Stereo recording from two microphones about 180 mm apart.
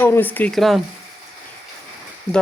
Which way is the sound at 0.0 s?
10° left (ahead or behind).